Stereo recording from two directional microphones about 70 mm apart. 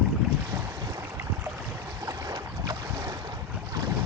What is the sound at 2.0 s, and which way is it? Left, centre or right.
Boat, right.